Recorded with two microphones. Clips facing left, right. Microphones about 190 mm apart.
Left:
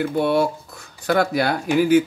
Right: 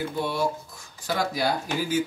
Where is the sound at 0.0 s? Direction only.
65° left (ahead or behind).